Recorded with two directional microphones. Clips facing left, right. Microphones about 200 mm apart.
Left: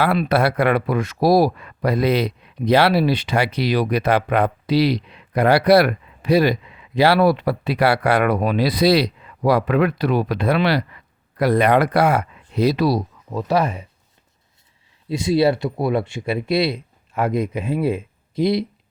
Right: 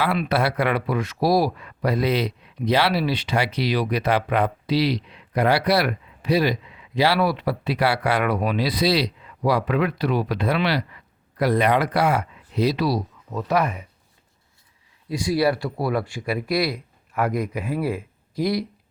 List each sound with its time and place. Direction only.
0.3 s speech: 50° left (ahead or behind)
13.3 s speech: 30° left (ahead or behind)
15.1 s speech: 25° left (ahead or behind)